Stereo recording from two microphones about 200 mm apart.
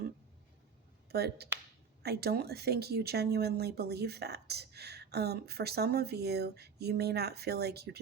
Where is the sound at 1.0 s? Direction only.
55° right (ahead or behind).